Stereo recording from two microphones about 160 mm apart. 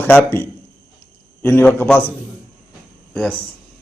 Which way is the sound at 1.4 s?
15° left (ahead or behind).